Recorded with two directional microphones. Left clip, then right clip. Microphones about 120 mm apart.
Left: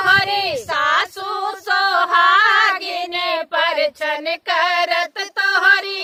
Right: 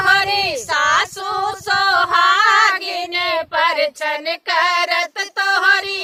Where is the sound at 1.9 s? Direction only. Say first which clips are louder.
Left 1 dB; 5° left (ahead or behind).